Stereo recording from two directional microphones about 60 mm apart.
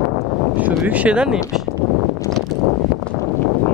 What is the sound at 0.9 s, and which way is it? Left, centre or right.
Speech, right.